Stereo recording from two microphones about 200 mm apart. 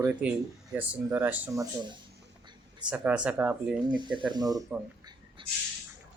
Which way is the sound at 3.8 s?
20° right (ahead or behind).